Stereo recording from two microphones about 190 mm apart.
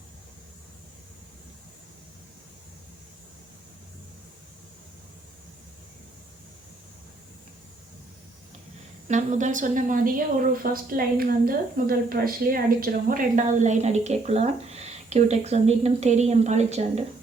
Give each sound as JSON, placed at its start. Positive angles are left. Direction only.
{"t": 9.0, "sound": "a woman's voice", "side_deg": -40}